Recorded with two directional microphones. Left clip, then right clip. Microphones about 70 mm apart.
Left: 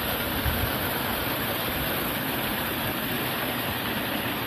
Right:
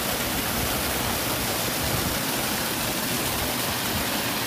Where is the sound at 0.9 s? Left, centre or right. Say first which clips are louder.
Right 1 dB; left.